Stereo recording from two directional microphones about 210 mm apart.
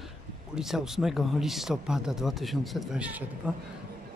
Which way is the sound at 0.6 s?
Centre (ahead or behind).